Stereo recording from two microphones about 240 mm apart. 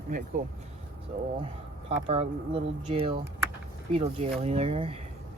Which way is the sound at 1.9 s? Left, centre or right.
Right.